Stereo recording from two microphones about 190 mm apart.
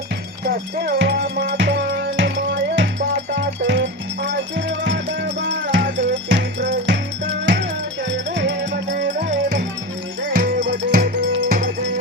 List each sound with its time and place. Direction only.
0.4 s music: 55° right (ahead or behind)
10.2 s music: 50° right (ahead or behind)
10.6 s music: 65° right (ahead or behind)